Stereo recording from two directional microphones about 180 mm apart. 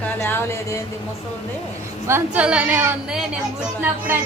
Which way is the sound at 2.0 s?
10° right (ahead or behind).